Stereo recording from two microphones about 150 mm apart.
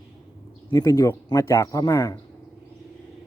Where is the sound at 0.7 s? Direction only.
25° left (ahead or behind).